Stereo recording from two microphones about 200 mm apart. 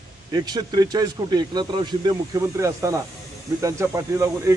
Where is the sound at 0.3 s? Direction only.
20° right (ahead or behind).